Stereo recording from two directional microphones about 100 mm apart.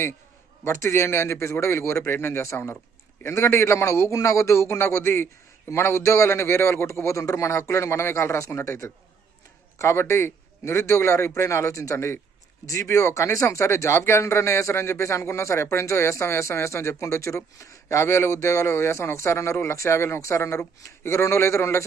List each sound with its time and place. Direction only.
0.6 s speech: 25° left (ahead or behind)